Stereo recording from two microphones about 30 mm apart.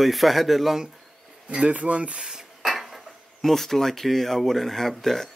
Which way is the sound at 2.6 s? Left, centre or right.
Centre.